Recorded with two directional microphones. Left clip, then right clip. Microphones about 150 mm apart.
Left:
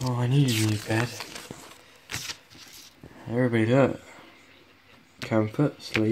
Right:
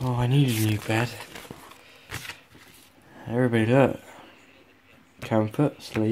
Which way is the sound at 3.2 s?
10° right (ahead or behind).